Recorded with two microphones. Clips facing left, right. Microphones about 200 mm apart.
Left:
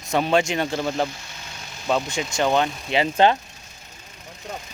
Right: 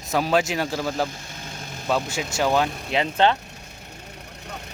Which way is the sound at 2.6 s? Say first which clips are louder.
Even; 60° right (ahead or behind).